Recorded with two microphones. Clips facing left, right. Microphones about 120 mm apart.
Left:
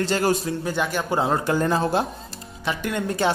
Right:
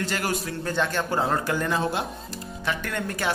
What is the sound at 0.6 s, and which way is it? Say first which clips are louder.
Speech: even; 10° left (ahead or behind).